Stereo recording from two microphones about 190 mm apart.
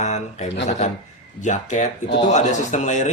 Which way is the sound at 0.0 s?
35° left (ahead or behind).